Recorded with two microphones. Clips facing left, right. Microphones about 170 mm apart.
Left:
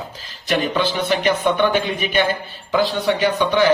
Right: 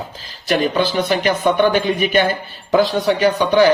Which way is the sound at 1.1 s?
40° right (ahead or behind).